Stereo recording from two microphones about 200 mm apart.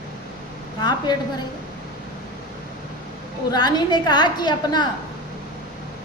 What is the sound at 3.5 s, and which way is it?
A woman's voice, 20° left (ahead or behind).